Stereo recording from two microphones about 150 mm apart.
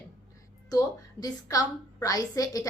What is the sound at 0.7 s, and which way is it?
A woman's voice, 25° left (ahead or behind).